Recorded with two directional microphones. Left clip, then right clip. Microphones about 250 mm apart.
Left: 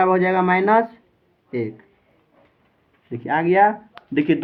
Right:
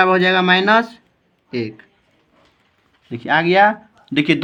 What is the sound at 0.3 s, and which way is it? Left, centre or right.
Speech, right.